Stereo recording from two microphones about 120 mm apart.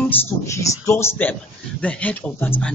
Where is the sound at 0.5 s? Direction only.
25° left (ahead or behind).